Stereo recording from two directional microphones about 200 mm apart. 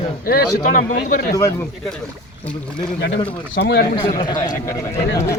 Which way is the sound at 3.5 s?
55° left (ahead or behind).